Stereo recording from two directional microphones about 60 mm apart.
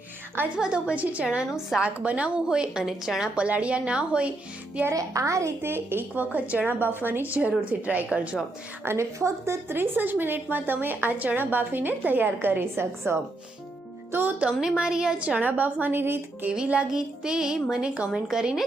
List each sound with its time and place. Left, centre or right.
0.5 s a woman's voice: centre
3.3 s a woman's voice: right
4.9 s a woman's voice: right
5.6 s a woman's voice: right
6.3 s a woman's voice: right
8.8 s a woman's voice: right
9.1 s a woman's voice: right
9.6 s a woman's voice: right
14.3 s a woman's voice: centre; by 16.5 s right
16.5 s a woman's voice: centre